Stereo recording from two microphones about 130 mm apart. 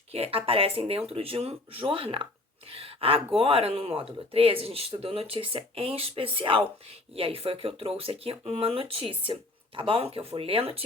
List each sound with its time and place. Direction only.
0.1 s speech: 45° right (ahead or behind)